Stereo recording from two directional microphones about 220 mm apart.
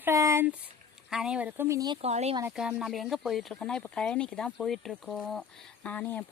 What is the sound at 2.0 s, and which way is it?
Speech, 30° right (ahead or behind).